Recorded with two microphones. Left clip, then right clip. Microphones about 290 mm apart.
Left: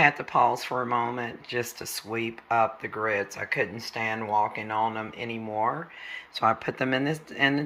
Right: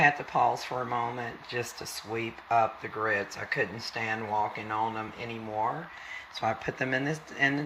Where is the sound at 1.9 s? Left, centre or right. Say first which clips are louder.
Left 3 dB; centre.